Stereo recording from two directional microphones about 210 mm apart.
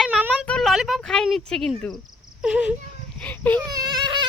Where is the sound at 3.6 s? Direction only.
20° right (ahead or behind).